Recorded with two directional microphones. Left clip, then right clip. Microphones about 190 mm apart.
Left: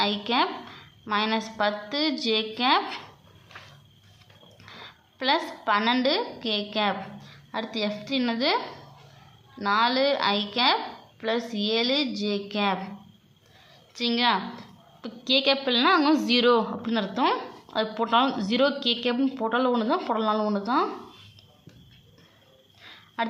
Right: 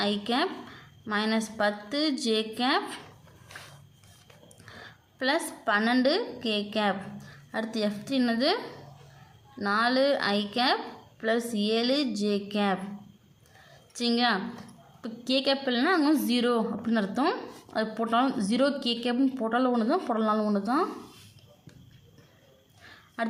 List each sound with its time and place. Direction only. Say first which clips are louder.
0.0 s a woman's voice: left 4 dB; 15° right (ahead or behind)
4.6 s a woman's voice: left 3 dB; 15° right (ahead or behind)
9.6 s a woman's voice: left 2 dB; 20° right (ahead or behind)
13.9 s a woman's voice: left 3 dB; 25° right (ahead or behind)
22.8 s a sound: left 6 dB; 15° right (ahead or behind)